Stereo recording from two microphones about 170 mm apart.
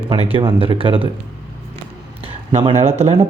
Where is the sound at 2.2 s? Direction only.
35° right (ahead or behind).